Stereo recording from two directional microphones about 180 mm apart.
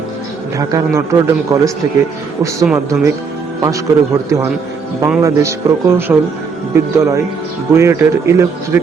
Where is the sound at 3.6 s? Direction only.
20° right (ahead or behind).